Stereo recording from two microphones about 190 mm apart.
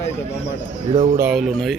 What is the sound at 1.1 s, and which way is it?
Speech, 5° right (ahead or behind).